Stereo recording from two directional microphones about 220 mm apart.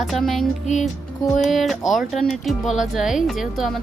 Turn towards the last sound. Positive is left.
turn(degrees=0)  # may be behind; listen again after turning